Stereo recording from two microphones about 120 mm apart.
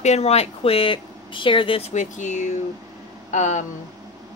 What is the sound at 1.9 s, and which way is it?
Speech, 85° left.